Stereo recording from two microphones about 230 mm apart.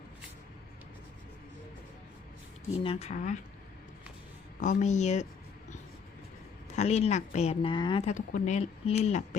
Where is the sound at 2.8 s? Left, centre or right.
Left.